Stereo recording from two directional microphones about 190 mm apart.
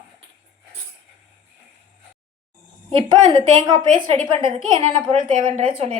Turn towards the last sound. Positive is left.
turn(degrees=-30)  # may be behind; listen again after turning